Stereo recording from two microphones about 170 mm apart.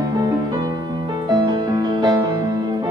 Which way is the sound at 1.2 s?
25° right (ahead or behind).